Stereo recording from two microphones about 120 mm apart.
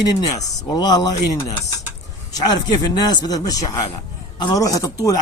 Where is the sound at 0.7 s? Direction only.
35° left (ahead or behind).